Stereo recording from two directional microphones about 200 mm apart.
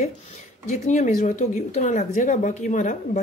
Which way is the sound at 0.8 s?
40° left (ahead or behind).